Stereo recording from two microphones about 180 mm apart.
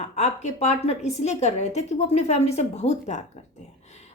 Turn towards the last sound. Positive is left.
turn(degrees=40)  # may be behind; listen again after turning